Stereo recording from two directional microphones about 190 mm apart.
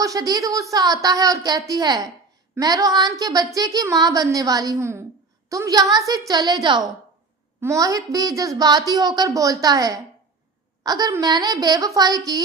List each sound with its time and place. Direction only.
0.0 s a woman's voice: 20° right (ahead or behind)